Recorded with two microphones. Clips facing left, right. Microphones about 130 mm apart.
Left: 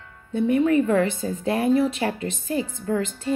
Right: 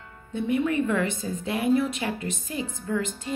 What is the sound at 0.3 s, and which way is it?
A woman's voice, 35° left (ahead or behind).